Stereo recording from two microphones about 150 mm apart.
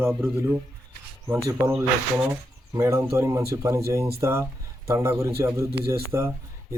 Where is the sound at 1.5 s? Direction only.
20° right (ahead or behind).